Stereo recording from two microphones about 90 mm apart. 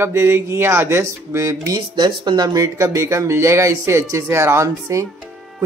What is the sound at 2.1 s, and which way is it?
Speech, 55° right (ahead or behind).